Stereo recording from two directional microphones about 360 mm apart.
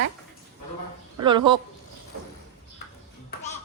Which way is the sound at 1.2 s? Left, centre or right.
Centre.